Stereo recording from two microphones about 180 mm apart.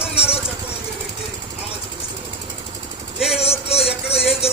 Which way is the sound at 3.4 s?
35° left (ahead or behind).